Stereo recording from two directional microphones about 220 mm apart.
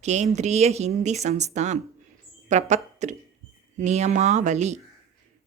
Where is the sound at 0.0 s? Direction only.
30° right (ahead or behind).